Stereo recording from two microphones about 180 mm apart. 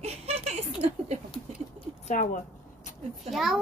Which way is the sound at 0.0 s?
35° right (ahead or behind).